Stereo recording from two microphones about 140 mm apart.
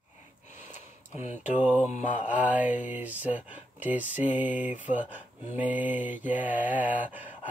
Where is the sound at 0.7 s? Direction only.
60° left (ahead or behind).